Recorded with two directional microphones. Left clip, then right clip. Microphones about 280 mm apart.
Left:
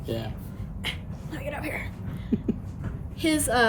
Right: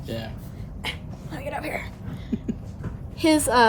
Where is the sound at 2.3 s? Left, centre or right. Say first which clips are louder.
Left 2 dB; centre.